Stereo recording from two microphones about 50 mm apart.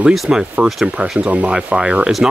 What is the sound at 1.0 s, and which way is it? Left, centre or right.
Speech, right.